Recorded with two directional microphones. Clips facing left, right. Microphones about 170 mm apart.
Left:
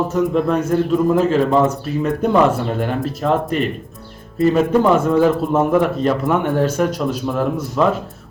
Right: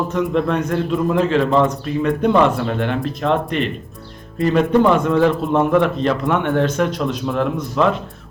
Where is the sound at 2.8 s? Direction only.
40° left (ahead or behind).